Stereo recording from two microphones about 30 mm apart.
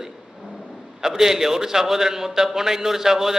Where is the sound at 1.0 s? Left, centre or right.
Centre.